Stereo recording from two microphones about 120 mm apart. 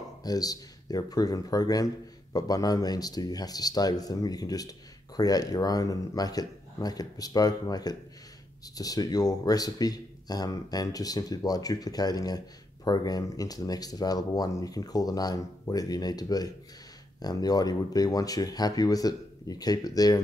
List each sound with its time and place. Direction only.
0.2 s speech: 30° left (ahead or behind)